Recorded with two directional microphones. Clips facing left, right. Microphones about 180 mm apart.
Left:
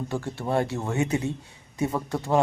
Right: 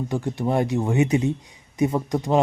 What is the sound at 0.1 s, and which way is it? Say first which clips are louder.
Speech: right 3 dB; 15° right (ahead or behind).